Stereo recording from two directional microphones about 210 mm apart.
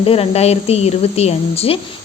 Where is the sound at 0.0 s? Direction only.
30° left (ahead or behind).